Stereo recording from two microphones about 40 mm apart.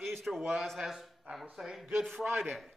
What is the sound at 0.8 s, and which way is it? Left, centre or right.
A man's voice, centre.